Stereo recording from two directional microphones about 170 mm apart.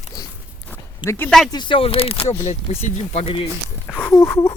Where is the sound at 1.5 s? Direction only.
30° left (ahead or behind).